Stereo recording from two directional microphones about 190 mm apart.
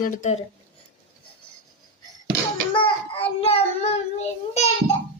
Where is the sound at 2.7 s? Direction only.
30° left (ahead or behind).